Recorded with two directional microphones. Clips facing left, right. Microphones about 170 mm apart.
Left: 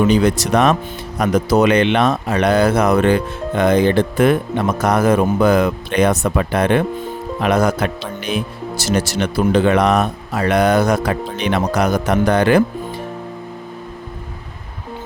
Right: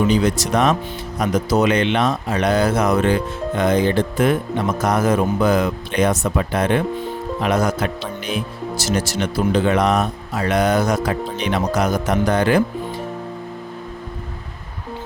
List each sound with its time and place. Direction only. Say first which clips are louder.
0.1 s speech: left 3 dB; 60° left (ahead or behind)